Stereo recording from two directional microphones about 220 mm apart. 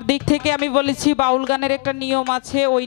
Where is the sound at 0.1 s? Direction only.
10° left (ahead or behind).